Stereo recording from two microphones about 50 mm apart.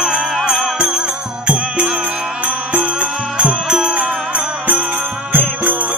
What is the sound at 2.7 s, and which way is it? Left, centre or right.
Music, right.